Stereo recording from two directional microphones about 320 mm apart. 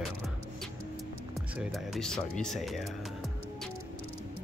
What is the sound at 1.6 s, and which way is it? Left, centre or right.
Speech, centre.